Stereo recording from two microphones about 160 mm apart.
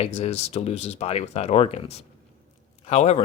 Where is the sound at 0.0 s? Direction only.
40° left (ahead or behind).